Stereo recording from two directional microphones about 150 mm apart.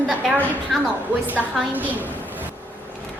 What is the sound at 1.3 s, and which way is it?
Speech, 10° right (ahead or behind).